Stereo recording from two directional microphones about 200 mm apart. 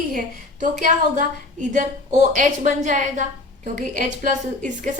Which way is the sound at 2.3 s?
40° right (ahead or behind).